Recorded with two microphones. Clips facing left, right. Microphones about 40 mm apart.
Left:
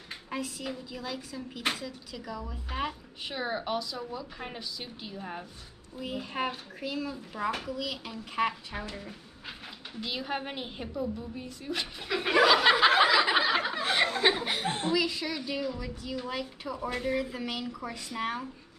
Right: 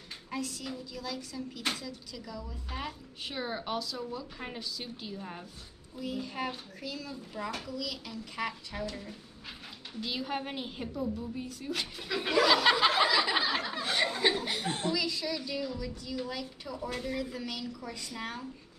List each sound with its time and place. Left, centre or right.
0.3 s speech: left
3.3 s speech: centre
5.9 s a woman's voice: left